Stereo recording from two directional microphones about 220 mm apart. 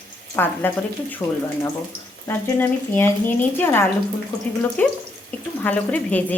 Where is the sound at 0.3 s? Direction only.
10° left (ahead or behind).